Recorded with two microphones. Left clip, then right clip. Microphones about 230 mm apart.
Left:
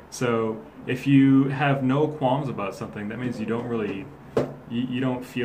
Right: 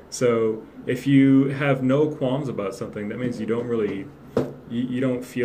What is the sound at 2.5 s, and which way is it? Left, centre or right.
Speech, left.